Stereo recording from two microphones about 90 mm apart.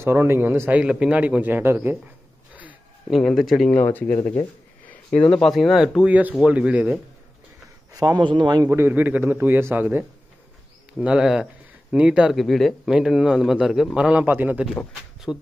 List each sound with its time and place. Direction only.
0.0 s a man's voice: 30° right (ahead or behind)
3.1 s speech: centre (ahead or behind)
3.7 s speech: 20° left (ahead or behind); by 6.0 s centre (ahead or behind)
6.0 s speech: 15° right (ahead or behind)
7.9 s a sound: 45° right (ahead or behind)
8.2 s a man's voice: 60° right (ahead or behind)
8.6 s a man's voice: 25° right (ahead or behind)
11.0 s speech: 10° right (ahead or behind)
12.4 s speech: centre (ahead or behind)
14.2 s a man's voice: 20° right (ahead or behind)
15.3 s speech: 20° left (ahead or behind)